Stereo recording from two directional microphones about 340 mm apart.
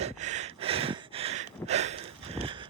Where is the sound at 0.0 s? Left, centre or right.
Centre.